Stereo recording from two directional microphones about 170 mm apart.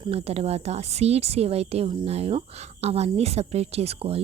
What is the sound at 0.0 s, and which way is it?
Speech, 35° right (ahead or behind).